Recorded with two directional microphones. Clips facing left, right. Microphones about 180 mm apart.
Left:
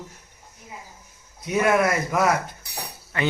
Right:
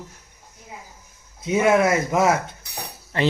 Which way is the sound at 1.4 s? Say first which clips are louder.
Right 3 dB; 25° right (ahead or behind).